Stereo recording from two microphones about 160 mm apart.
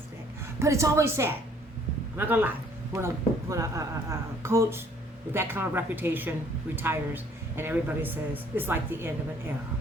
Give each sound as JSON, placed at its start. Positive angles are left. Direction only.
{"t": 0.6, "sound": "a woman's voice", "side_deg": -20}